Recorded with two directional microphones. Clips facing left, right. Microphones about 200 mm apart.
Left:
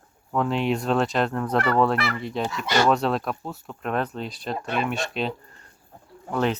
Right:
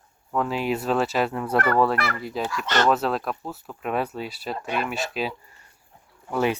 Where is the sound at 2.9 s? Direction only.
Centre (ahead or behind).